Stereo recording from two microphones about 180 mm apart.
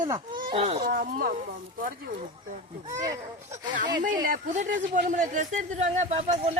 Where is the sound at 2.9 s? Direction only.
20° right (ahead or behind).